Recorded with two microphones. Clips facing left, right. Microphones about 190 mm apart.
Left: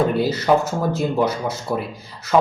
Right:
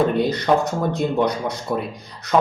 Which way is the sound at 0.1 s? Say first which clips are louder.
Left 1 dB; 5° left (ahead or behind).